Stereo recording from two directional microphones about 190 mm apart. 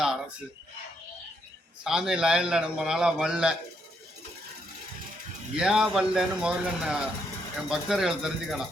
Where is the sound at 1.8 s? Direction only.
Centre (ahead or behind).